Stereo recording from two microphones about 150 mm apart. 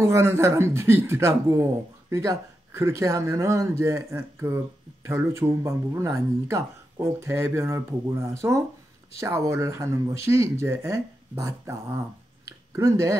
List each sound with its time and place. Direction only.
0.0 s speech: 15° right (ahead or behind)